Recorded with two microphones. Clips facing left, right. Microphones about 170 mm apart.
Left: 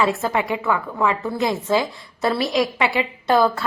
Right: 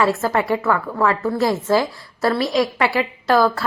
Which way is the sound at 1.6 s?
20° left (ahead or behind).